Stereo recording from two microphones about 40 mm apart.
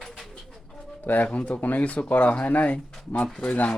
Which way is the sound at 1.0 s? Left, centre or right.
Left.